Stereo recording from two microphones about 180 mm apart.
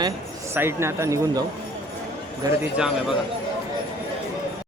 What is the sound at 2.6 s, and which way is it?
Speech, 5° right (ahead or behind).